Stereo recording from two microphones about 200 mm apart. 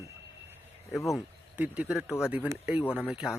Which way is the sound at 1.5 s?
5° right (ahead or behind).